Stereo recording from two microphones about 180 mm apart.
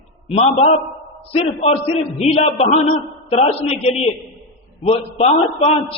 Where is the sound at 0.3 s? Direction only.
35° left (ahead or behind).